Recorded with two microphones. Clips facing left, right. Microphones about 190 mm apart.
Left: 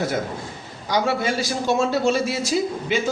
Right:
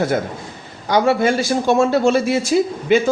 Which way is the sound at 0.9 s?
55° right (ahead or behind).